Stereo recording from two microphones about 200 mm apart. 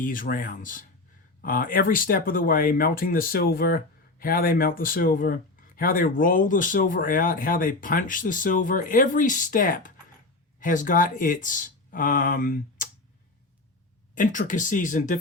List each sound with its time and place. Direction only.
0.0 s speech: 45° left (ahead or behind)
14.2 s speech: 40° left (ahead or behind)